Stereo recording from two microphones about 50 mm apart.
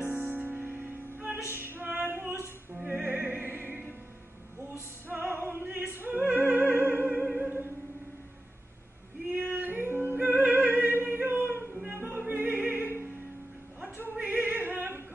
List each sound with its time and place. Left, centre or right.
0.0 s music: right
2.0 s female singing: right
2.9 s opera: right
9.3 s music: right
12.4 s opera: right
14.2 s opera: right